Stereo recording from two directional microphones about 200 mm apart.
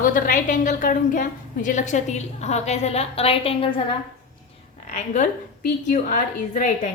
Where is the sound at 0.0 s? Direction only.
45° left (ahead or behind).